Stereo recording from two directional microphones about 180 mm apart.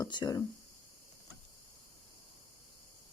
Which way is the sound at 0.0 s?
20° left (ahead or behind).